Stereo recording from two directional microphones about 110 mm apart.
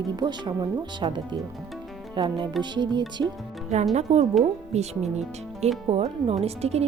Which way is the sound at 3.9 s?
90° right.